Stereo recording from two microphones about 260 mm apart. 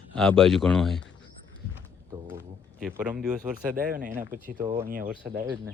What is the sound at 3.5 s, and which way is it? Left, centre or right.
Speech, right.